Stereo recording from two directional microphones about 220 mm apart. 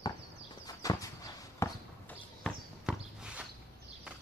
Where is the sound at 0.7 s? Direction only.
15° left (ahead or behind).